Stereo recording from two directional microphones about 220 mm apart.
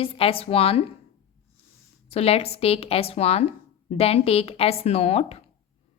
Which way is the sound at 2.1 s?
25° left (ahead or behind).